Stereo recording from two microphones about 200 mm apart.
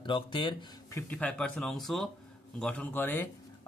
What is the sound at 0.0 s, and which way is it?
Speech, 25° left (ahead or behind).